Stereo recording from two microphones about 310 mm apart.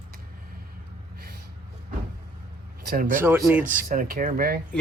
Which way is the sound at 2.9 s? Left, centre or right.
Right.